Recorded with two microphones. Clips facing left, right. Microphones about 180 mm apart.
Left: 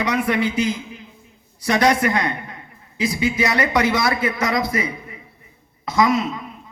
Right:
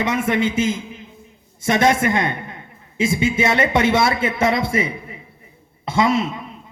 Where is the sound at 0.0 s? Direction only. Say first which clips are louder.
Right 1 dB; 25° right (ahead or behind).